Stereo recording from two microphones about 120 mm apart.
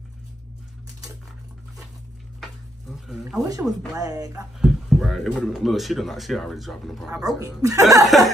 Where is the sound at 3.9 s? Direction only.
30° right (ahead or behind).